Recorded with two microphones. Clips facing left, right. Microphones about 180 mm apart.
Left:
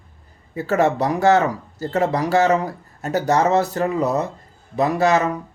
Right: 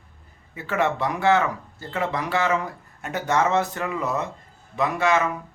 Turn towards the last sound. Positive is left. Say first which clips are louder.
# left 4 dB
turn(degrees=40)  # may be behind; listen again after turning